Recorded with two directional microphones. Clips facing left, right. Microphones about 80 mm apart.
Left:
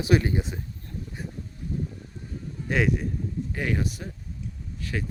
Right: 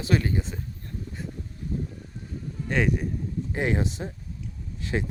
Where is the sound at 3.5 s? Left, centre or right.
Right.